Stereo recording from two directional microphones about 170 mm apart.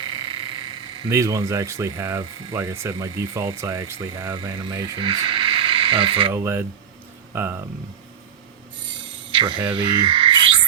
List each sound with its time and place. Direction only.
0.0 s speech: 30° right (ahead or behind)
6.3 s speech: 15° right (ahead or behind)
9.3 s speech: 30° right (ahead or behind)
9.7 s frog: 30° right (ahead or behind)